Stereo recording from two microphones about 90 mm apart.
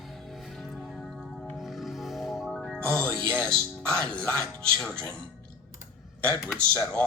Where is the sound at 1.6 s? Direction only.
Centre (ahead or behind).